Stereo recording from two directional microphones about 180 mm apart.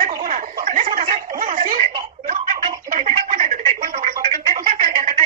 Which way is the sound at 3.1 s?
40° right (ahead or behind).